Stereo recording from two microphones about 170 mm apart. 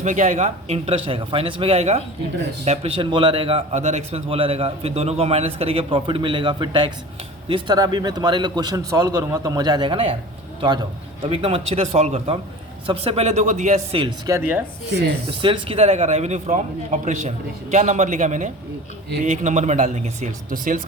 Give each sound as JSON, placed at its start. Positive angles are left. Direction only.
{"t": 0.0, "sound": "a man's voice", "side_deg": -45}
{"t": 11.3, "sound": "a man's voice", "side_deg": -35}
{"t": 14.3, "sound": "speech", "side_deg": -15}
{"t": 15.4, "sound": "a man's voice", "side_deg": -30}